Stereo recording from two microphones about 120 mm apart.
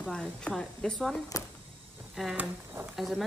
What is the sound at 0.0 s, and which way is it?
Speech, 10° left (ahead or behind).